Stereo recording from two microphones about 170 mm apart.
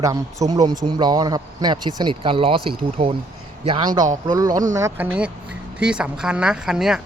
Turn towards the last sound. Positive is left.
turn(degrees=-5)  # may be behind; listen again after turning